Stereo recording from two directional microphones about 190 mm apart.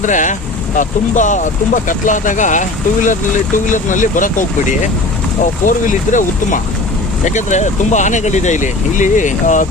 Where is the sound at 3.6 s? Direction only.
40° left (ahead or behind).